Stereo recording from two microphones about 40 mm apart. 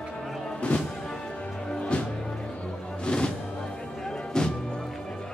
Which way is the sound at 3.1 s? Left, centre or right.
Left.